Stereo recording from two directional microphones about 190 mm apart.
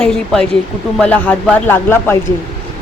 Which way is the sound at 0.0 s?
5° left (ahead or behind).